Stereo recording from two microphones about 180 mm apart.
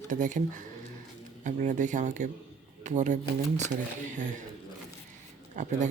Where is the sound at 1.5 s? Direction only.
45° right (ahead or behind).